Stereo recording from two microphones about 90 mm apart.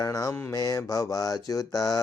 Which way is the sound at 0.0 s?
40° left (ahead or behind).